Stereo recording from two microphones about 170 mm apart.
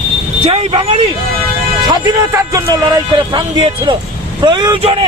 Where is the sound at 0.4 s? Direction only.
35° right (ahead or behind).